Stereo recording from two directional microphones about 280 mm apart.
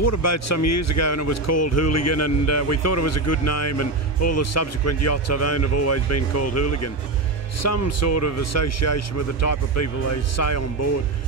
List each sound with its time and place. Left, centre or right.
0.0 s speech: left